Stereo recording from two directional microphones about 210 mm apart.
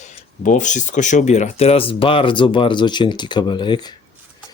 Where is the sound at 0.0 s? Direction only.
35° left (ahead or behind); by 3.9 s 20° left (ahead or behind).